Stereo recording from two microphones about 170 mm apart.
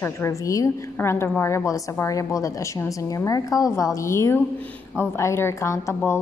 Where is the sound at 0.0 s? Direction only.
15° left (ahead or behind).